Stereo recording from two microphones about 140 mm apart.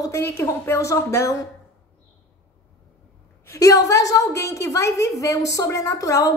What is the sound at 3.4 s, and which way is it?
A woman's voice, 20° left (ahead or behind).